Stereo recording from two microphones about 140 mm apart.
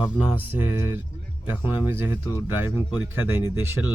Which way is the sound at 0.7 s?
15° right (ahead or behind).